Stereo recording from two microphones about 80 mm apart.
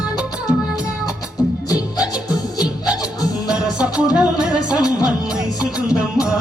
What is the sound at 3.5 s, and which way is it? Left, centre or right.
Music, centre.